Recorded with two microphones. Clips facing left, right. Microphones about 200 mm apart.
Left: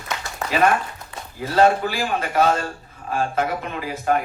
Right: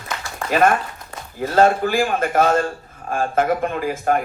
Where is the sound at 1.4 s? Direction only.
50° right (ahead or behind).